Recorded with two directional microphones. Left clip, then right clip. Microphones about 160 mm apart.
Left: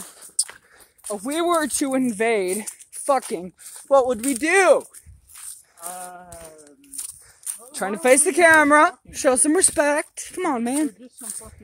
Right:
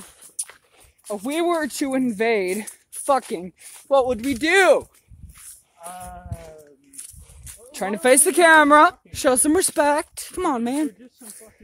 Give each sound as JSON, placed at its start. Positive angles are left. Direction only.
{"t": 1.0, "sound": "speech", "side_deg": -15}
{"t": 1.6, "sound": "speech", "side_deg": 0}
{"t": 3.8, "sound": "speech", "side_deg": 5}
{"t": 4.3, "sound": "speech", "side_deg": -15}
{"t": 7.0, "sound": "a sound", "side_deg": 90}
{"t": 7.7, "sound": "a woman's voice", "side_deg": -20}
{"t": 10.5, "sound": "speech", "side_deg": -5}